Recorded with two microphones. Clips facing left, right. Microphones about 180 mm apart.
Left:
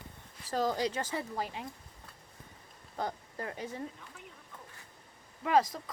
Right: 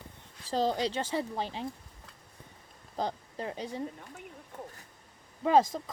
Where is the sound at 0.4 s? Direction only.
30° right (ahead or behind).